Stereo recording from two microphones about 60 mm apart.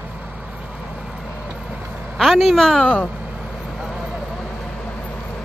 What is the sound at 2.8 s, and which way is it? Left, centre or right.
Speech, centre.